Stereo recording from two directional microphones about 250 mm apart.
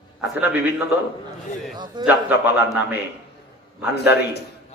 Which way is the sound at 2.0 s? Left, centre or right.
Centre.